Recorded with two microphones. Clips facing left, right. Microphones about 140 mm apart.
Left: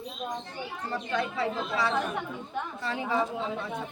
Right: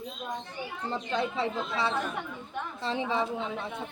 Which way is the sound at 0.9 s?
20° right (ahead or behind).